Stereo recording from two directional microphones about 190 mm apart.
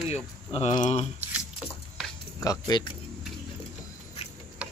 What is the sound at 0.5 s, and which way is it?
Speech, 35° left (ahead or behind).